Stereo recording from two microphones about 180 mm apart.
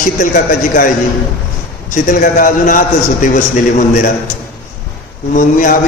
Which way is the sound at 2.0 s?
50° left (ahead or behind).